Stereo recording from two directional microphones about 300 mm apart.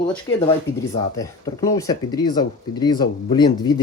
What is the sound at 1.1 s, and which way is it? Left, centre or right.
Speech, centre.